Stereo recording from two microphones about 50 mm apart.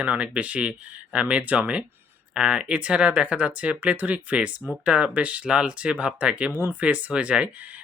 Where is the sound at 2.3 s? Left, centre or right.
Centre.